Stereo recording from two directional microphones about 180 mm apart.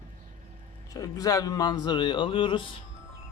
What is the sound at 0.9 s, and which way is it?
A man's voice, 20° left (ahead or behind).